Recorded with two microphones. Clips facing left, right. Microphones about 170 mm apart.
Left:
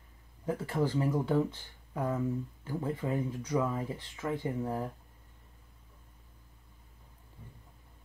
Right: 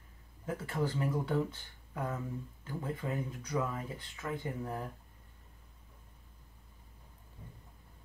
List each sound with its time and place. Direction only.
0.5 s speech: 25° left (ahead or behind)